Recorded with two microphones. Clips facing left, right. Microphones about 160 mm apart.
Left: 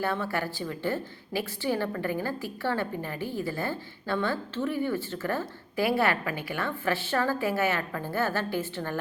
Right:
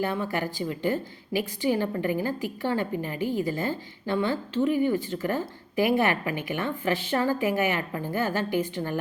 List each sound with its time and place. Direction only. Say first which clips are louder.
0.0 s a woman's voice: right 2 dB; 15° right (ahead or behind)